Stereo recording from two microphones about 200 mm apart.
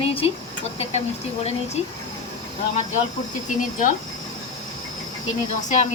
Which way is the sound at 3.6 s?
40° left (ahead or behind).